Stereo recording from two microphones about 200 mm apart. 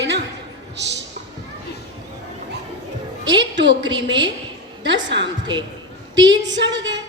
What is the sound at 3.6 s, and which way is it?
A woman's voice, 60° right (ahead or behind).